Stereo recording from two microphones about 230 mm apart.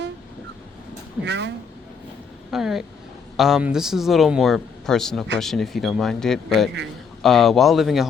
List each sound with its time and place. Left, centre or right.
1.2 s speech: right
2.5 s speech: centre